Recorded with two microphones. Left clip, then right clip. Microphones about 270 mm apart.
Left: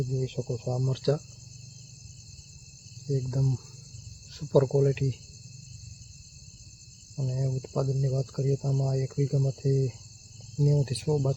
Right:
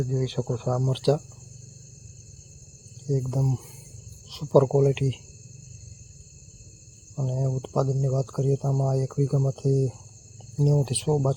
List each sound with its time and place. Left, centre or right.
0.3 s speech: centre
0.8 s cricket: centre
3.1 s cricket: centre
7.2 s cricket: centre